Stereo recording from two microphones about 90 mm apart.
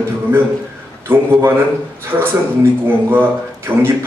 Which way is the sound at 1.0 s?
25° right (ahead or behind).